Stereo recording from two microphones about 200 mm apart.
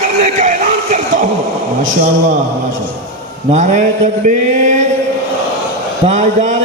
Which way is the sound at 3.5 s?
40° right (ahead or behind).